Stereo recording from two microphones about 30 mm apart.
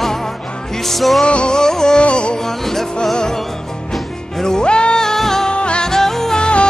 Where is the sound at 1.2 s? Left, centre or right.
Left.